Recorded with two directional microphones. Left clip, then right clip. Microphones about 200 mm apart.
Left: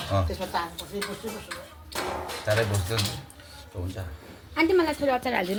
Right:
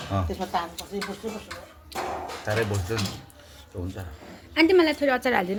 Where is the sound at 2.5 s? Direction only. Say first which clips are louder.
Left 2 dB; 35° right (ahead or behind).